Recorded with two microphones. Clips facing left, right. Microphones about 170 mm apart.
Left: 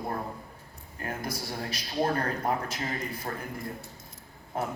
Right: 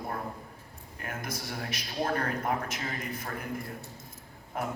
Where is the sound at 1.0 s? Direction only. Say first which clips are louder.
Left 3 dB; 35° left (ahead or behind).